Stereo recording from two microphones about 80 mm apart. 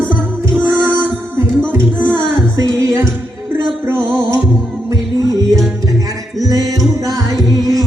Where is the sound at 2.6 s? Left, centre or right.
Right.